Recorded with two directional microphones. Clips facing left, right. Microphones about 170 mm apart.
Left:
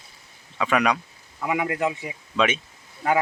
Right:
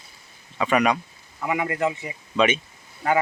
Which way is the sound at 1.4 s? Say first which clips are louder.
Even; 10° left (ahead or behind).